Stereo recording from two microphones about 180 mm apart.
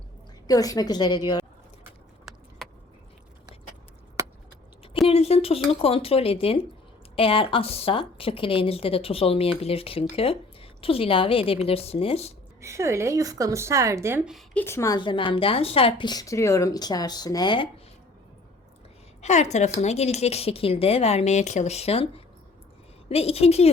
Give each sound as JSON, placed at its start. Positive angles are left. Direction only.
{"t": 0.4, "sound": "a woman's voice", "side_deg": 20}
{"t": 1.8, "sound": "a sound", "side_deg": 0}
{"t": 5.0, "sound": "a woman's voice", "side_deg": 35}
{"t": 12.6, "sound": "speech", "side_deg": -15}
{"t": 14.3, "sound": "speech", "side_deg": 0}
{"t": 14.6, "sound": "a woman's voice", "side_deg": 15}
{"t": 19.2, "sound": "a woman's voice", "side_deg": 40}